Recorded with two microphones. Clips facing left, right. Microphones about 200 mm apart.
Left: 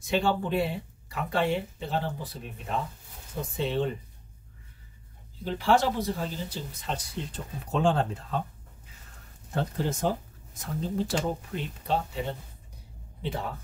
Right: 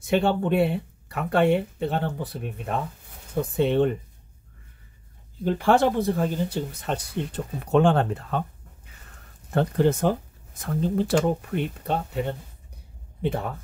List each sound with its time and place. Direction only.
0.0 s speech: 60° right (ahead or behind)
5.4 s speech: 55° right (ahead or behind)
9.5 s speech: 60° right (ahead or behind)